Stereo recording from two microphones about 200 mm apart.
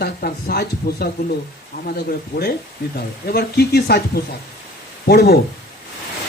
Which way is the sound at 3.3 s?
50° left (ahead or behind).